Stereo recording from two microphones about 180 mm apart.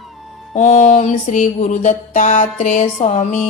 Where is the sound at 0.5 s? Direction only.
40° left (ahead or behind).